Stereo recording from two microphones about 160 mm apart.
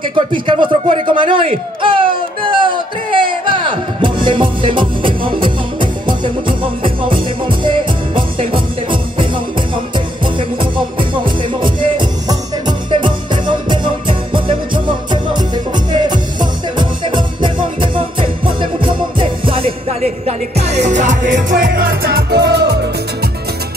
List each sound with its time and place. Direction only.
0.1 s a man's voice: 30° right (ahead or behind)
2.4 s a sound: 30° right (ahead or behind)
3.5 s music: 30° right (ahead or behind); by 22.8 s 90° right